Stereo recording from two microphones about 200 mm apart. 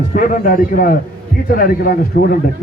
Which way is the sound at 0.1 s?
40° left (ahead or behind).